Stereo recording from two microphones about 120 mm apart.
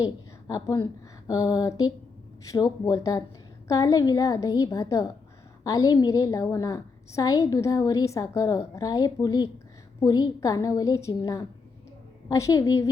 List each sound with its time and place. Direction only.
0.0 s a woman's voice: 30° left (ahead or behind)